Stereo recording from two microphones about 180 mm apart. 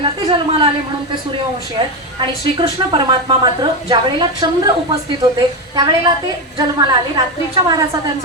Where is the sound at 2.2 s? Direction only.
25° right (ahead or behind).